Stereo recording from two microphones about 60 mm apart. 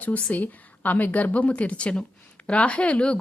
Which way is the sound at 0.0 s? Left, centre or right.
Left.